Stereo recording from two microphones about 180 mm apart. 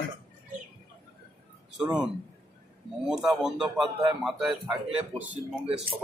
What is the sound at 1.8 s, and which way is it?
Speech, 5° right (ahead or behind).